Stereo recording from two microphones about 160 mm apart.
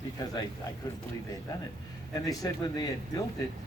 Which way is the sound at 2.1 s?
25° left (ahead or behind).